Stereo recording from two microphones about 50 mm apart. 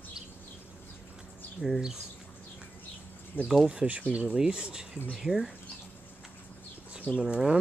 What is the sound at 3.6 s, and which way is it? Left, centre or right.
Speech, right.